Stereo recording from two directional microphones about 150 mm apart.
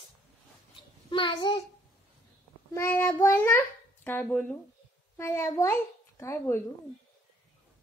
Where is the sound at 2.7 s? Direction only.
15° left (ahead or behind).